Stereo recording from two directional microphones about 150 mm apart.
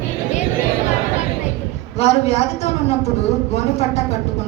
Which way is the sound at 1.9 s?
45° left (ahead or behind).